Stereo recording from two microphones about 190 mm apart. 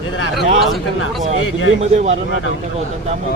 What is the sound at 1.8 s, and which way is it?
Speech, 35° right (ahead or behind).